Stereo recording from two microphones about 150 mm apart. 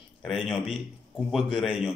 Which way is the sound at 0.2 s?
5° right (ahead or behind).